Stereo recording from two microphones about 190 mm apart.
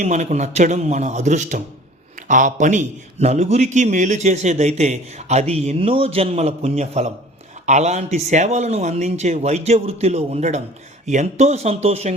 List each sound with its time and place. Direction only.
0.0 s a man's voice: 35° right (ahead or behind)